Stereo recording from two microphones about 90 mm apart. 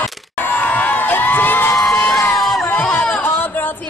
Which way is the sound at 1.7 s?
Centre (ahead or behind).